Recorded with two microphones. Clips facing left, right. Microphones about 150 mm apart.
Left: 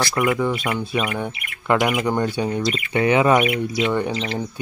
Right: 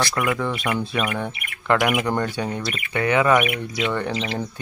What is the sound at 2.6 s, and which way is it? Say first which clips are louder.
Speech: left 4 dB; 20° left (ahead or behind).